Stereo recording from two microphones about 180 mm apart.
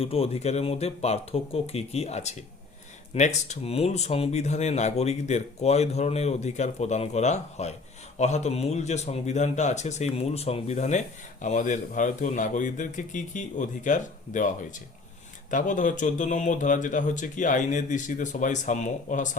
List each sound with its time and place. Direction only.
0.0 s speech: 35° left (ahead or behind)